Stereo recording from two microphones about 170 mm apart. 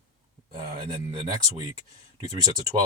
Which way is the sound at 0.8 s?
25° right (ahead or behind).